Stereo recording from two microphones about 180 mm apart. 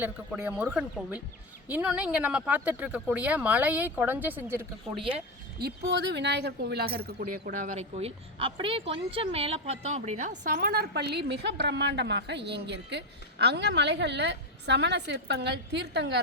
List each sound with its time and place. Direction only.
0.0 s speech: 10° right (ahead or behind)
6.1 s speech: 70° right (ahead or behind)